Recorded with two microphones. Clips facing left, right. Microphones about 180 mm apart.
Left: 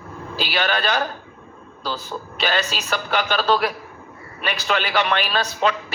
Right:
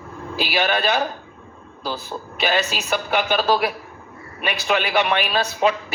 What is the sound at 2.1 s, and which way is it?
Speech, 20° right (ahead or behind).